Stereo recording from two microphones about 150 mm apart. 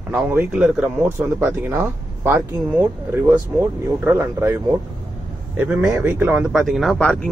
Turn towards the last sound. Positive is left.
turn(degrees=5)  # may be behind; listen again after turning